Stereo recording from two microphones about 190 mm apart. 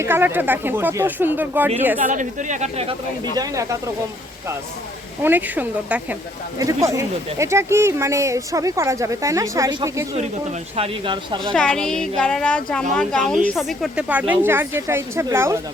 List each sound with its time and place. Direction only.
0.0 s speech: 10° right (ahead or behind)
2.0 s speech: 40° right (ahead or behind)
3.3 s speech: 20° right (ahead or behind)
5.2 s speech: 10° right (ahead or behind)
10.8 s speech: 30° right (ahead or behind)
11.5 s a woman's voice: 5° left (ahead or behind); by 15.5 s 15° right (ahead or behind)